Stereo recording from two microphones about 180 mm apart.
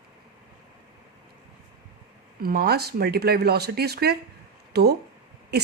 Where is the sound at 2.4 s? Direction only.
60° right (ahead or behind).